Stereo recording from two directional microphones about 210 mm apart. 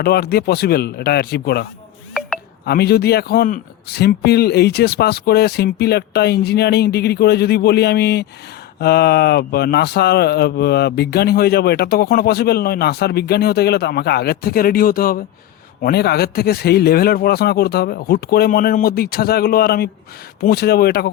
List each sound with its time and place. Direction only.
0.0 s speech: 50° left (ahead or behind)
2.6 s speech: 50° left (ahead or behind)